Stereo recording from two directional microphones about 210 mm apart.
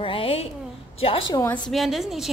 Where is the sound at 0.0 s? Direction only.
25° left (ahead or behind).